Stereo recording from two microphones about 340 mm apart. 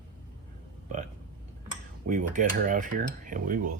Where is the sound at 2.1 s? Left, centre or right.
Right.